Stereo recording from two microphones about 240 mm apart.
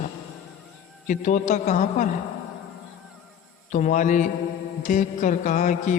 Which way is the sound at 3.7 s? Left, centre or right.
Left.